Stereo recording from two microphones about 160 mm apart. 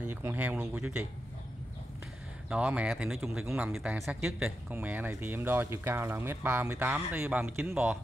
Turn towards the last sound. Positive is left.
turn(degrees=-10)  # may be behind; listen again after turning